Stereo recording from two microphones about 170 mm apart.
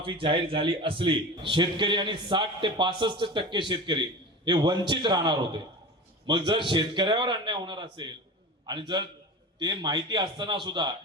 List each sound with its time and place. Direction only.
0.0 s a man's voice: 30° right (ahead or behind)